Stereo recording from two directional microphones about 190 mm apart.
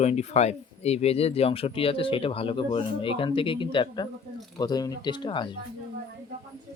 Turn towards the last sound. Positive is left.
turn(degrees=25)  # may be behind; listen again after turning